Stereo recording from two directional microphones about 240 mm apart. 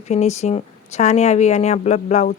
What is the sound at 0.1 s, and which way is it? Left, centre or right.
Speech, left.